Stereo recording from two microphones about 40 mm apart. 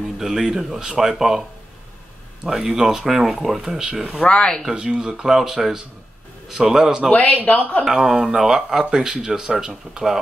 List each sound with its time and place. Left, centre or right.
0.2 s speech: centre
2.4 s speech: centre
4.3 s speech: left
4.6 s speech: right
5.2 s speech: centre
7.1 s speech: left
7.8 s speech: centre